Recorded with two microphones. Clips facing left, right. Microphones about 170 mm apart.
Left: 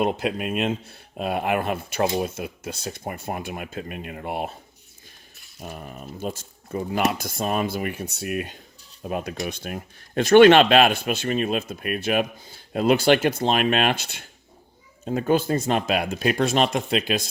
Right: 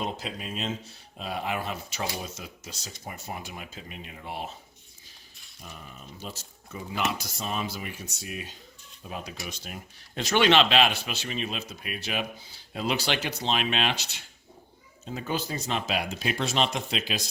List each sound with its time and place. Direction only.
0.0 s speech: 60° left (ahead or behind)
5.5 s speech: 55° left (ahead or behind)